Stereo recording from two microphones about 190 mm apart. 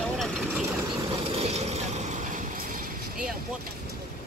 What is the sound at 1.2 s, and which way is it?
Vehicle, 35° right (ahead or behind).